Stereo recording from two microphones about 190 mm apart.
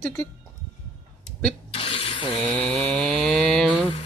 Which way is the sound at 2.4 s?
10° left (ahead or behind).